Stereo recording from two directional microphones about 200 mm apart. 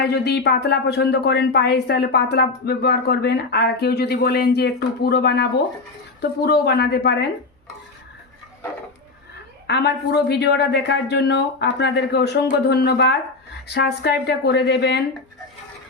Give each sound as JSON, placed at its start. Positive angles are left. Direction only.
{"t": 0.0, "sound": "a woman's voice", "side_deg": 55}
{"t": 9.6, "sound": "a woman's voice", "side_deg": 60}